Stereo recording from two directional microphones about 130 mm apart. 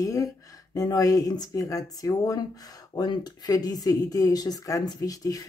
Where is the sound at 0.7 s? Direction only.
30° left (ahead or behind).